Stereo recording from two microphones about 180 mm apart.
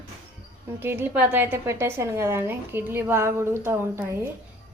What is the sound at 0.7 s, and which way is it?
A woman's voice, 10° right (ahead or behind).